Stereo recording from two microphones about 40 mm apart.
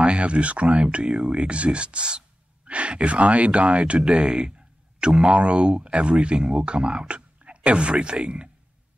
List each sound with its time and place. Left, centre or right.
0.0 s speech: right